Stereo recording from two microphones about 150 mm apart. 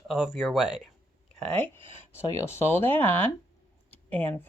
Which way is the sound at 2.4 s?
15° left (ahead or behind).